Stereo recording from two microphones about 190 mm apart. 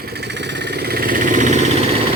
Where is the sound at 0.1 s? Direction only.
60° right (ahead or behind); by 1.5 s 45° right (ahead or behind).